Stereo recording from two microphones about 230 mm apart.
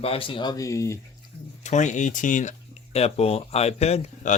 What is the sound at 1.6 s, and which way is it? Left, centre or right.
Speech, left.